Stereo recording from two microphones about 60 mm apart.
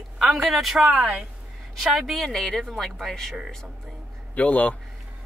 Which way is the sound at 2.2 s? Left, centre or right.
Centre.